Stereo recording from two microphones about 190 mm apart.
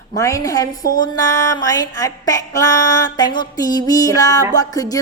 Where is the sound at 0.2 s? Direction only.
15° left (ahead or behind).